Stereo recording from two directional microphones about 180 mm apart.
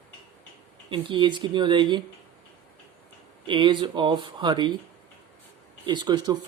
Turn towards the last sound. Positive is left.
turn(degrees=-25)  # may be behind; listen again after turning